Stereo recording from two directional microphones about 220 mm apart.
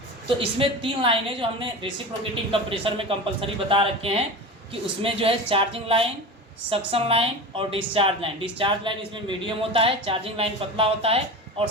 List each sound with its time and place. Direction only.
0.3 s a woman's voice: 25° right (ahead or behind)